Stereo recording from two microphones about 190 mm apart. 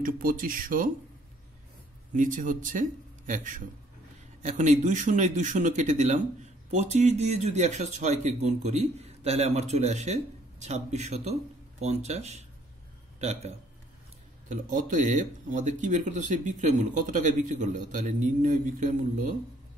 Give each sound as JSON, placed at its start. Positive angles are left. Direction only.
{"t": 0.0, "sound": "speech", "side_deg": -45}
{"t": 2.1, "sound": "speech", "side_deg": -45}